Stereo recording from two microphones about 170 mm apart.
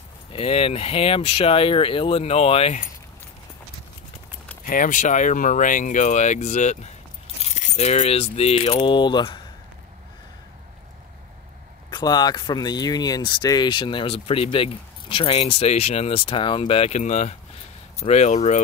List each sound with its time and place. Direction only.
0.3 s speech: 35° left (ahead or behind)
4.6 s speech: 50° left (ahead or behind); by 9.4 s 30° left (ahead or behind)
11.9 s speech: 25° left (ahead or behind); by 18.6 s 45° left (ahead or behind)